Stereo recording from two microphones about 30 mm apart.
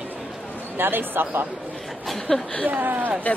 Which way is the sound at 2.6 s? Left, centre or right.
Right.